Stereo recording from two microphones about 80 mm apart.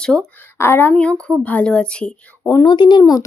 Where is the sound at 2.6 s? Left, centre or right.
Left.